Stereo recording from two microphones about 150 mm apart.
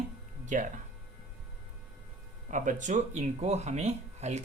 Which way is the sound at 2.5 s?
60° right (ahead or behind).